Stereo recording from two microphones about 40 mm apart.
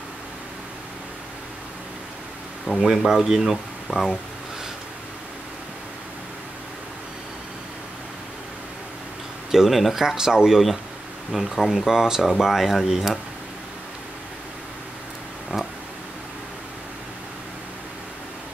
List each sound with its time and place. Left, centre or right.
2.6 s speech: centre
3.1 s speech: centre
3.9 s speech: centre
9.5 s speech: centre
11.9 s speech: centre
15.5 s a sound: right